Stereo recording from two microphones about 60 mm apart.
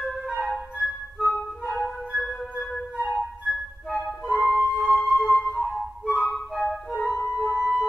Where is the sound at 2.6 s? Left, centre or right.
Centre.